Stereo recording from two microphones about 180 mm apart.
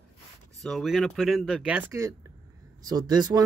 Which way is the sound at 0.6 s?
Centre (ahead or behind).